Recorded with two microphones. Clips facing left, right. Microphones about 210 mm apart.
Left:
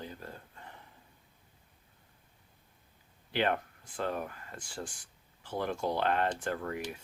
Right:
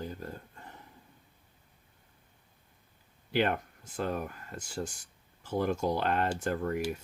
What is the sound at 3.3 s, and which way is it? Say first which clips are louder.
Speech: right 2 dB; 45° right (ahead or behind).